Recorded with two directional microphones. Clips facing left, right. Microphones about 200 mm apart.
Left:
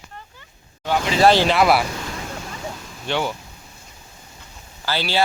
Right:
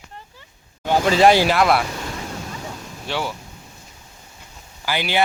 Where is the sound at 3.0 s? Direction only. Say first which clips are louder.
Left 3 dB; 5° right (ahead or behind).